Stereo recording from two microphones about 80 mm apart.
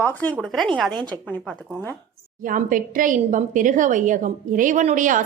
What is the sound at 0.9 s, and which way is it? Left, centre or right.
Speech, right.